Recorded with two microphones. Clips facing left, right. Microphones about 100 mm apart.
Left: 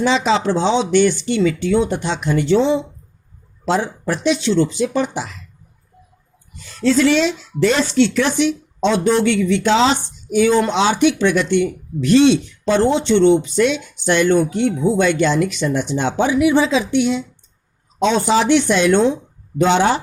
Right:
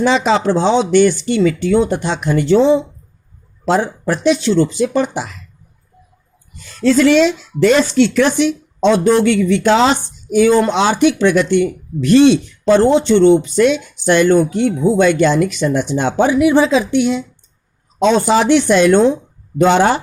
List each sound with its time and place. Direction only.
0.0 s speech: 50° right (ahead or behind)
6.7 s speech: 50° right (ahead or behind)